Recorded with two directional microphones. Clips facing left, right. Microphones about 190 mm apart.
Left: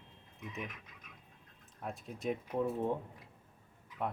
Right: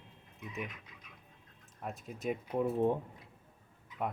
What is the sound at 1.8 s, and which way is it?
Speech, centre (ahead or behind).